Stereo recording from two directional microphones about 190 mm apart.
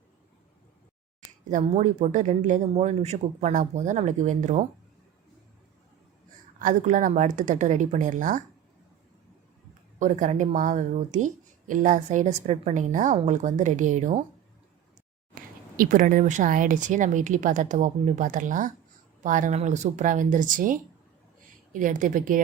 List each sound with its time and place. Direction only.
1.5 s speech: 40° right (ahead or behind)
6.6 s speech: 40° right (ahead or behind)
10.0 s speech: 40° right (ahead or behind)
15.3 s a sound: 45° right (ahead or behind)
15.8 s speech: 45° right (ahead or behind)